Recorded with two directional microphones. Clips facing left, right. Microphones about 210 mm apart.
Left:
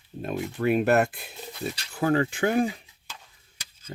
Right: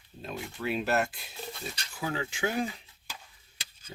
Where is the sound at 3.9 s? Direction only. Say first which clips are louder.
Left 7 dB; 55° left (ahead or behind).